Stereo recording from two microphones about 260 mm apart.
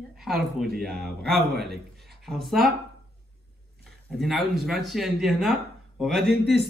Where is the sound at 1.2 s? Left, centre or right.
Right.